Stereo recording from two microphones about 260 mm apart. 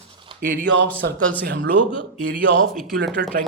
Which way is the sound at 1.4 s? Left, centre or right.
Right.